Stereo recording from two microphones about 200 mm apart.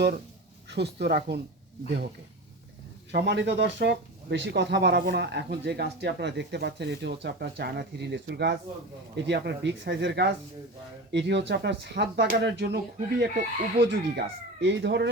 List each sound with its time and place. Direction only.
0.7 s speech: 55° right (ahead or behind)
3.1 s speech: 55° right (ahead or behind)